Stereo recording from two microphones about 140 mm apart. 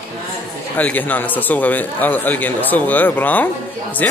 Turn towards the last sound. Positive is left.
turn(degrees=10)  # may be behind; listen again after turning